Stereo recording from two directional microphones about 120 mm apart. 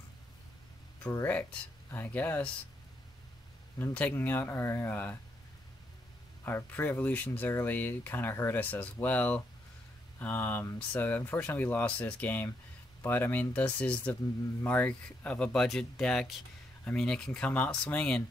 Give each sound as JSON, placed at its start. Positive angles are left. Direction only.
{"t": 1.1, "sound": "speech", "side_deg": 15}
{"t": 3.7, "sound": "speech", "side_deg": 15}
{"t": 6.4, "sound": "speech", "side_deg": 15}